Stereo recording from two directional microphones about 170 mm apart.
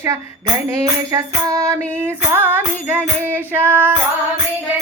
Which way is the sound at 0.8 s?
20° right (ahead or behind).